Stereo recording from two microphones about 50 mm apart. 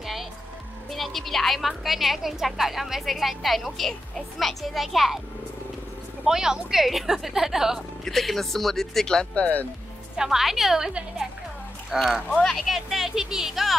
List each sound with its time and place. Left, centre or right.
0.0 s music: centre
0.8 s a woman's voice: centre
6.2 s a woman's voice: centre
8.0 s a woman's voice: centre
9.3 s speech: left
10.1 s a woman's voice: centre
11.9 s a woman's voice: centre